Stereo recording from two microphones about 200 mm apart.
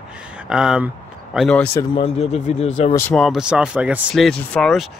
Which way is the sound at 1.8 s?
25° left (ahead or behind).